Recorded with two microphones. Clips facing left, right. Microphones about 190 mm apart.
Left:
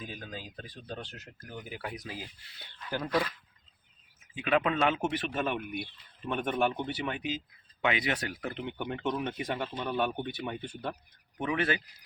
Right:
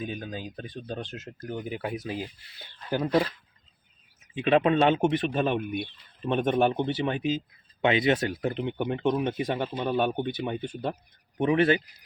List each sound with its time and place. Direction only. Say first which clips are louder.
0.0 s speech: right 7 dB; 25° right (ahead or behind)
3.0 s speech: right 6 dB; 25° right (ahead or behind)
4.4 s speech: right 6 dB; 25° right (ahead or behind)